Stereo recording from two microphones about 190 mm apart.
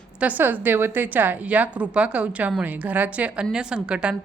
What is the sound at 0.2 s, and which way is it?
A woman's voice, 10° right (ahead or behind).